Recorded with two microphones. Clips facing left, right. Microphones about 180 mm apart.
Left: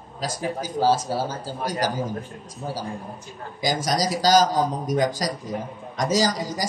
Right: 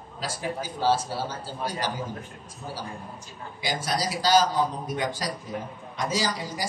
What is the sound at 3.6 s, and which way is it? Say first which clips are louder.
A man's voice: left 5 dB; 40° left (ahead or behind).